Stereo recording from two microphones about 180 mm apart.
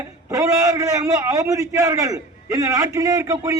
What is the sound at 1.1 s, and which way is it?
A man's voice, 20° right (ahead or behind).